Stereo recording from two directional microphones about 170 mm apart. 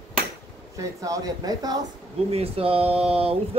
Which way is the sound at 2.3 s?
35° right (ahead or behind).